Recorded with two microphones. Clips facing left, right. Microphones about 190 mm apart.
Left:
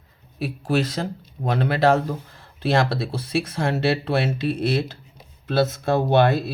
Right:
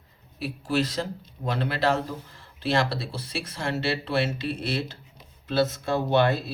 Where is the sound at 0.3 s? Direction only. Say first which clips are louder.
Left 3 dB; 50° left (ahead or behind).